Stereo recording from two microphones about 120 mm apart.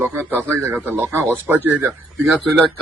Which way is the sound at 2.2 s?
5° right (ahead or behind).